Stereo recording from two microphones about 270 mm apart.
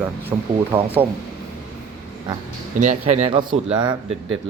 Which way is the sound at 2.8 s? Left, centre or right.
Right.